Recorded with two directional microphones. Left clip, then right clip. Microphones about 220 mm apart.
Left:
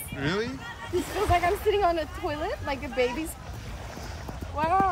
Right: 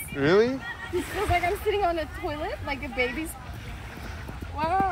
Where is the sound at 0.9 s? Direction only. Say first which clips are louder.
Left 1 dB; 45° left (ahead or behind).